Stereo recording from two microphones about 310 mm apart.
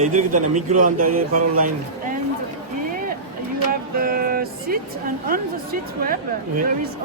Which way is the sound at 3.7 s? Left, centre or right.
Right.